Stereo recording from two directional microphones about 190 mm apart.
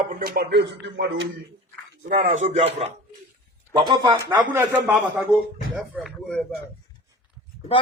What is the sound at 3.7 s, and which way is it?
Speech, 25° right (ahead or behind).